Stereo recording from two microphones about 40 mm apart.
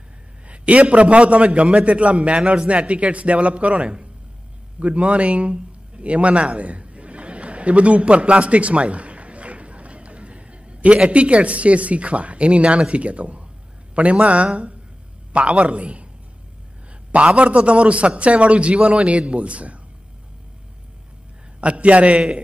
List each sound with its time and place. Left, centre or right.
0.5 s a man's voice: right
17.1 s a man's voice: right
21.5 s a man's voice: right